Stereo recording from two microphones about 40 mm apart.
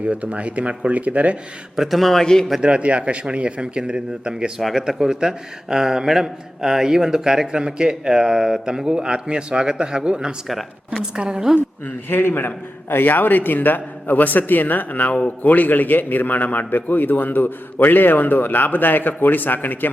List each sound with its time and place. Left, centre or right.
0.0 s speech: right
1.7 s a man's voice: centre
2.0 s a man's voice: centre
2.2 s a man's voice: centre
2.6 s a man's voice: right
4.6 s a man's voice: centre
12.0 s a man's voice: left